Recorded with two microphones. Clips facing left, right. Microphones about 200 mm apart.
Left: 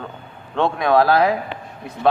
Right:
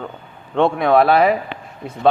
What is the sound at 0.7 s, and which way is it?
Speech, 65° right (ahead or behind).